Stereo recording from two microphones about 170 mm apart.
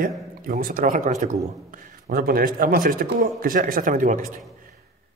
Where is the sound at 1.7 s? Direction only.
60° right (ahead or behind).